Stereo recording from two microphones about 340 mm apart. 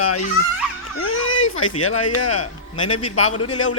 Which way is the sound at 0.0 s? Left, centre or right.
Left.